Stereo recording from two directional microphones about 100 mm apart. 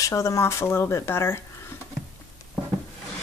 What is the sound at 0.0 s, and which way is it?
Speech, 35° left (ahead or behind).